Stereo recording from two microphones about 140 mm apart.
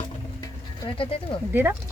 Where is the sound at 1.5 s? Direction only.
15° right (ahead or behind).